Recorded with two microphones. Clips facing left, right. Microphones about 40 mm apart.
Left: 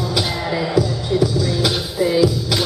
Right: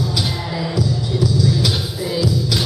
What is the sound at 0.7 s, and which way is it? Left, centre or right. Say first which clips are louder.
Music: left 3 dB; left.